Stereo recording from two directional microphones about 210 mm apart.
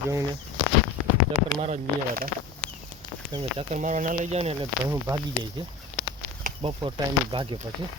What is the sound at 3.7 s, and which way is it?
Speech, 35° right (ahead or behind).